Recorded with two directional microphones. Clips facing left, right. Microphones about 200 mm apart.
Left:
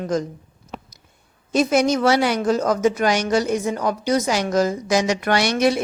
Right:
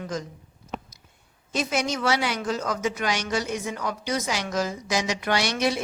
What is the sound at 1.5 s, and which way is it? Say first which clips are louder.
Speech: left 9 dB; 40° left (ahead or behind).